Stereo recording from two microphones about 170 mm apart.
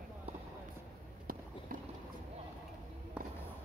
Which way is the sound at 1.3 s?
55° right (ahead or behind).